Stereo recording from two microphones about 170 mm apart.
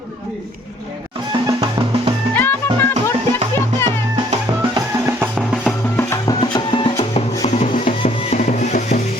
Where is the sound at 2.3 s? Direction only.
10° left (ahead or behind).